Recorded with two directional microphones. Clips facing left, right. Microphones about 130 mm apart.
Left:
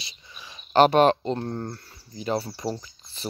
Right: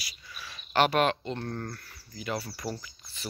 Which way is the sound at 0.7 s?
35° left (ahead or behind).